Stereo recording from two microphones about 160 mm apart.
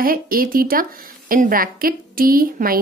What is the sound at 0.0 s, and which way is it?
A woman's voice, 65° right (ahead or behind).